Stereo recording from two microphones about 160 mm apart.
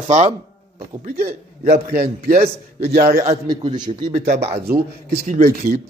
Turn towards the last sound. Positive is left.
turn(degrees=-60)  # may be behind; listen again after turning